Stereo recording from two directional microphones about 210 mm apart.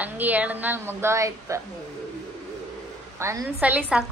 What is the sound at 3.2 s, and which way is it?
Speech, 15° right (ahead or behind).